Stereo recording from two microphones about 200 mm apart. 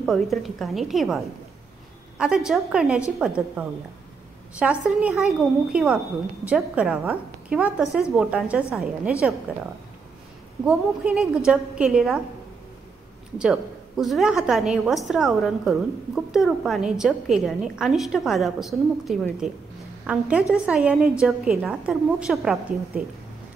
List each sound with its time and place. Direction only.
0.0 s a woman's voice: centre (ahead or behind)
10.6 s a woman's voice: 5° right (ahead or behind)
13.4 s a woman's voice: centre (ahead or behind)